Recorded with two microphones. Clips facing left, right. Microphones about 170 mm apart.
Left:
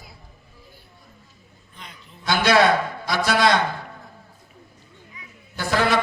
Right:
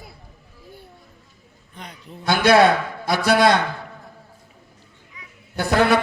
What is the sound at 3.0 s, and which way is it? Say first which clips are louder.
Speech: right 4 dB; 55° right (ahead or behind).